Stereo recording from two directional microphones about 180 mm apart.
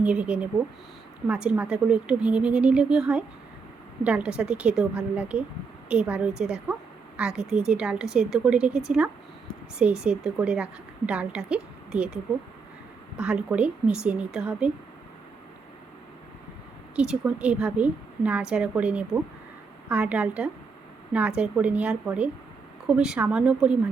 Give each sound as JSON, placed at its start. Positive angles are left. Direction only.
{"t": 0.0, "sound": "a woman's voice", "side_deg": -5}
{"t": 16.9, "sound": "a woman's voice", "side_deg": -5}